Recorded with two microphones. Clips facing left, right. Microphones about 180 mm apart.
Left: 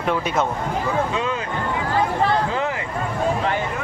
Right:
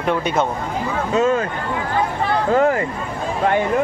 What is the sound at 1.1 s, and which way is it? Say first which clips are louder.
Speech: right 8 dB; 45° right (ahead or behind).